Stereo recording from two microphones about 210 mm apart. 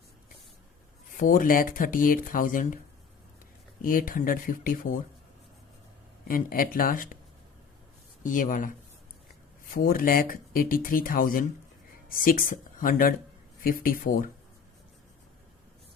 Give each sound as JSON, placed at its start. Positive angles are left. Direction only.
{"t": 1.1, "sound": "speech", "side_deg": 40}
{"t": 3.8, "sound": "speech", "side_deg": 40}
{"t": 6.2, "sound": "speech", "side_deg": 45}
{"t": 8.2, "sound": "speech", "side_deg": 40}
{"t": 9.7, "sound": "speech", "side_deg": 45}